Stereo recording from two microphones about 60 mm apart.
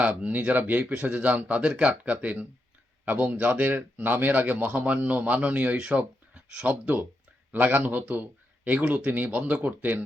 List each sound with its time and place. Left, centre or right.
0.0 s speech: right